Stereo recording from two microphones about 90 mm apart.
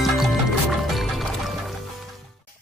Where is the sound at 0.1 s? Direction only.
Centre (ahead or behind).